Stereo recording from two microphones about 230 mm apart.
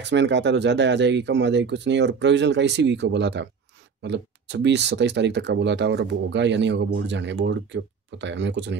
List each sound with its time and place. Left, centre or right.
0.0 s speech: right